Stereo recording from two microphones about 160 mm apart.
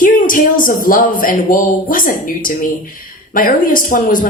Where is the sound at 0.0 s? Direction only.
55° left (ahead or behind).